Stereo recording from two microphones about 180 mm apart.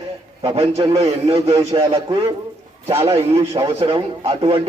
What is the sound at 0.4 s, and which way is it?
A man's voice, 35° right (ahead or behind).